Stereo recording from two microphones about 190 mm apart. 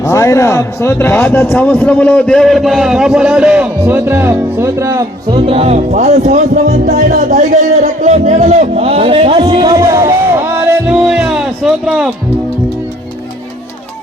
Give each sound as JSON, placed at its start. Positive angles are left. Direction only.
{"t": 0.0, "sound": "a man's voice", "side_deg": 15}
{"t": 5.5, "sound": "a man's voice", "side_deg": -30}